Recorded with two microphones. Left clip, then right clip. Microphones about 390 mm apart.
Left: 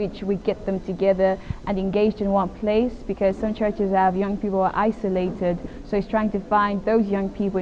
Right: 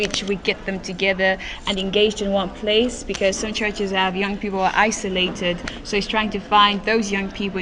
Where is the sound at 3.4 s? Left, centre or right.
Left.